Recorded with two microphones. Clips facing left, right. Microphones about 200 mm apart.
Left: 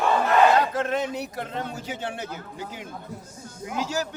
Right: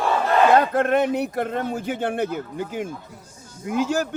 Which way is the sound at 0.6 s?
60° right (ahead or behind).